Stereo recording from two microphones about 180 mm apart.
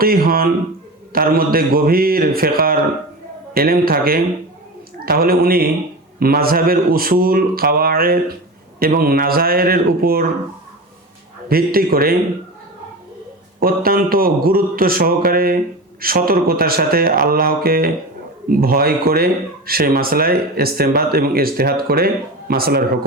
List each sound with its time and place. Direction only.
0.0 s speech: 55° right (ahead or behind)
11.4 s speech: 55° right (ahead or behind)
13.6 s speech: 55° right (ahead or behind)